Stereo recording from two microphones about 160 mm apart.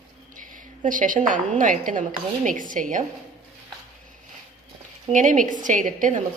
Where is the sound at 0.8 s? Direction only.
55° right (ahead or behind).